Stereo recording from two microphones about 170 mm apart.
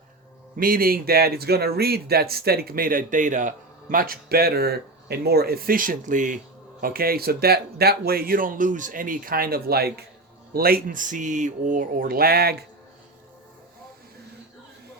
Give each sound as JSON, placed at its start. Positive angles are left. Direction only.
{"t": 0.5, "sound": "speech", "side_deg": -60}
{"t": 6.8, "sound": "speech", "side_deg": -60}